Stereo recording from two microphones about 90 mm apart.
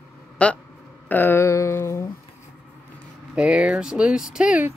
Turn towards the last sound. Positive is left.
turn(degrees=-10)  # may be behind; listen again after turning